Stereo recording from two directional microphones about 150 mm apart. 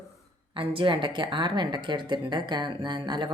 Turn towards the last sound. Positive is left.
turn(degrees=-30)  # may be behind; listen again after turning